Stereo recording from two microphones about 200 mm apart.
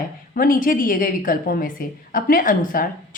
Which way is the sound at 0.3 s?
45° left (ahead or behind).